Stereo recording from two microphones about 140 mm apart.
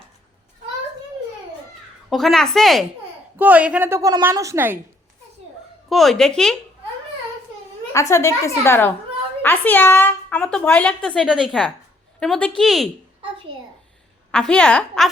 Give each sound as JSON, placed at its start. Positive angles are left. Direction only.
{"t": 2.0, "sound": "a woman's voice", "side_deg": 0}
{"t": 3.3, "sound": "speech", "side_deg": -10}
{"t": 5.9, "sound": "a woman's voice", "side_deg": 0}
{"t": 7.9, "sound": "a woman's voice", "side_deg": 20}
{"t": 14.3, "sound": "a woman's voice", "side_deg": 5}